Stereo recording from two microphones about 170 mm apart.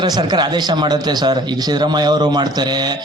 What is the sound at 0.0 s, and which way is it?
A man's voice, 25° right (ahead or behind).